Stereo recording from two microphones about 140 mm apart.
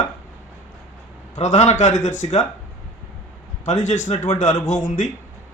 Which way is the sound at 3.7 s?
55° left (ahead or behind).